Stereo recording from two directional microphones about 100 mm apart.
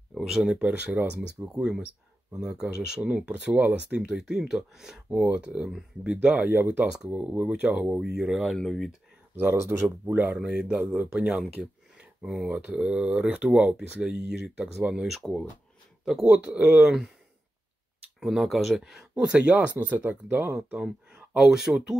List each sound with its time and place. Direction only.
0.1 s speech: centre (ahead or behind)
9.3 s speech: 25° right (ahead or behind)
9.8 s speech: 15° right (ahead or behind)
12.0 s a sound: 5° right (ahead or behind)
12.4 s speech: 10° right (ahead or behind)
18.2 s speech: centre (ahead or behind)